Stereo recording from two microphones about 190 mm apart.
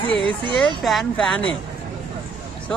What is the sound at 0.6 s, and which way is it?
Speech, centre (ahead or behind).